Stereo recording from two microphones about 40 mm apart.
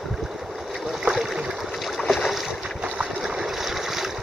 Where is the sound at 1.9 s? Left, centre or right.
Centre.